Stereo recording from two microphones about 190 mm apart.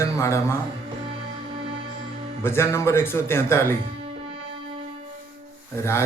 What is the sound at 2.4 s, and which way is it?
Speech, 15° left (ahead or behind).